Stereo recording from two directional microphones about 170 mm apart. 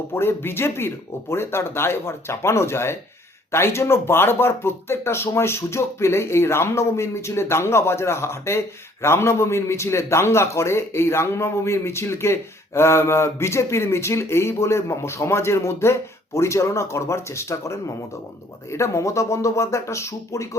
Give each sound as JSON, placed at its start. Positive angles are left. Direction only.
{"t": 0.1, "sound": "speech", "side_deg": 15}